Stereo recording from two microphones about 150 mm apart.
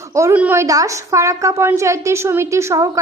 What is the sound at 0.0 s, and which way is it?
A woman's voice, 20° right (ahead or behind).